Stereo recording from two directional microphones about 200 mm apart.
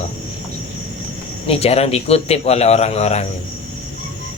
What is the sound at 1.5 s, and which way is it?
Speech, 30° left (ahead or behind).